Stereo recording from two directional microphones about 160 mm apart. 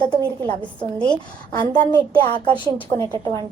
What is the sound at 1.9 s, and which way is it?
Speech, 30° left (ahead or behind).